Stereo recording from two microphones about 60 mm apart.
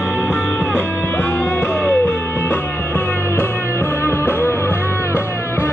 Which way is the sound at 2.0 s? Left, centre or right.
Left.